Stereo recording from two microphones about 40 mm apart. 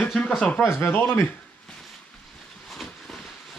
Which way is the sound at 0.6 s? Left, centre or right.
Centre.